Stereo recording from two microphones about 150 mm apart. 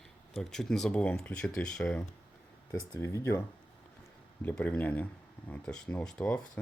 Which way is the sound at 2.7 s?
20° left (ahead or behind).